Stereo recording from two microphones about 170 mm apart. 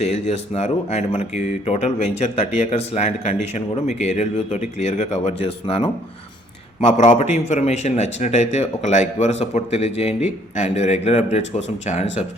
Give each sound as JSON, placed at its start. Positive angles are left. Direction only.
{"t": 0.0, "sound": "speech", "side_deg": 40}